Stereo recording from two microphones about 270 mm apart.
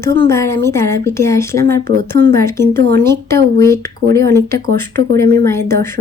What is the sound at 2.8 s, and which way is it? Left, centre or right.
Speech, right.